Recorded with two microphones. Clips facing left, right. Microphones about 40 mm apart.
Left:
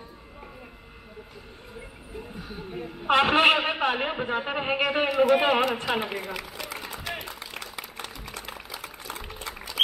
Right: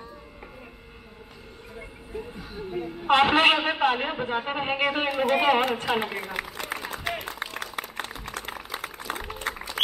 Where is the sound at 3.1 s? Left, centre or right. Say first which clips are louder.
Right 1 dB; right.